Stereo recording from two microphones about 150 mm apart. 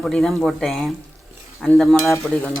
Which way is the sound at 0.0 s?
Centre (ahead or behind).